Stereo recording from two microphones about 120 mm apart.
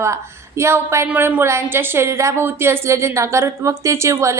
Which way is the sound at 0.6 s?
25° right (ahead or behind).